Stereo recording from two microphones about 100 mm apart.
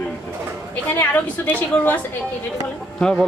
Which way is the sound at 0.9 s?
20° left (ahead or behind).